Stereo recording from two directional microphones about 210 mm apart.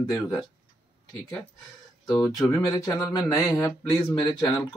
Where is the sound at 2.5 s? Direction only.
15° left (ahead or behind).